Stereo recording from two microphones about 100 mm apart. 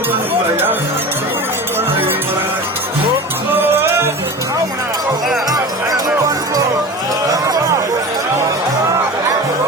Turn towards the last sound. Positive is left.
turn(degrees=-35)  # may be behind; listen again after turning